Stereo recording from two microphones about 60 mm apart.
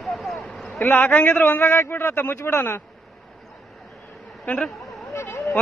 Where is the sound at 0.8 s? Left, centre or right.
Left.